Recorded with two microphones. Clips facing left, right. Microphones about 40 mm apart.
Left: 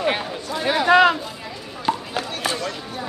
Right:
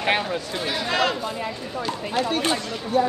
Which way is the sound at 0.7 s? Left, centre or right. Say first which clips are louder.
Left 9 dB; left.